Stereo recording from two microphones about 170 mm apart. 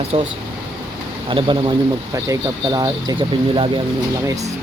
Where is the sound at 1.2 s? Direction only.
30° right (ahead or behind).